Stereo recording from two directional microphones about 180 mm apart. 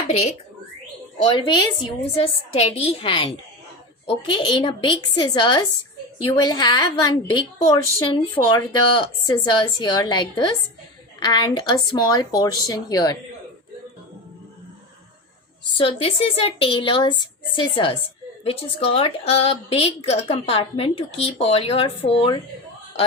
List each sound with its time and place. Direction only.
1.2 s a woman's voice: 25° left (ahead or behind)
4.4 s a woman's voice: 25° left (ahead or behind)
15.8 s a woman's voice: 30° left (ahead or behind)